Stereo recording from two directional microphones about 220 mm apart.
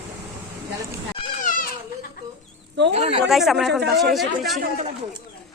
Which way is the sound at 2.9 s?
30° right (ahead or behind).